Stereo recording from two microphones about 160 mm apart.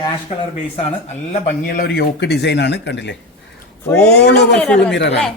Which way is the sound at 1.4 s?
60° left (ahead or behind).